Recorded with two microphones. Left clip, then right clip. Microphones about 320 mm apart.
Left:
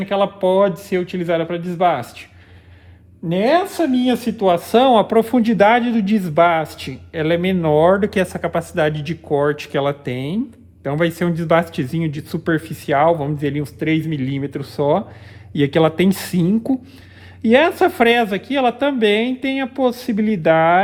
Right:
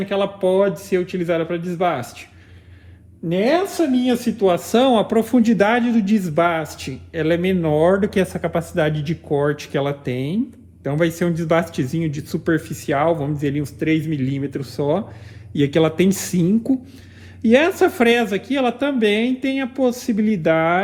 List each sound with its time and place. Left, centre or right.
0.0 s speech: left
3.2 s speech: left